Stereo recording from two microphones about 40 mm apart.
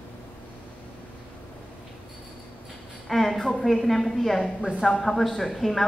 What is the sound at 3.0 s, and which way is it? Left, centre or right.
A woman's voice, centre.